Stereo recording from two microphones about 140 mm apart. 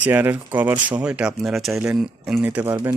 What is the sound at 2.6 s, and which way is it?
Speech, 25° right (ahead or behind).